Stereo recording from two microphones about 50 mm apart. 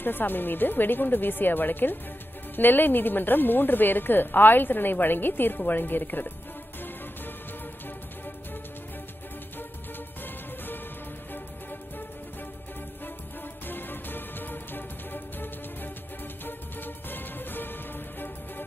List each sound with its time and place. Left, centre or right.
0.0 s a woman's voice: left
13.7 s music: left
16.4 s music: left